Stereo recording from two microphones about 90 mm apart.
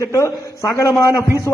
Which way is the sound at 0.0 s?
35° left (ahead or behind).